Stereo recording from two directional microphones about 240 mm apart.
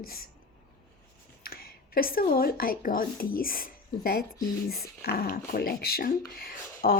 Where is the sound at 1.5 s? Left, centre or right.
Left.